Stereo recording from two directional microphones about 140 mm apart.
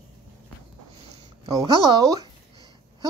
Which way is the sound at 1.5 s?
30° right (ahead or behind).